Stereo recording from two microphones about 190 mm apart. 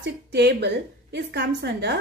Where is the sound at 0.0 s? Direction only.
60° right (ahead or behind).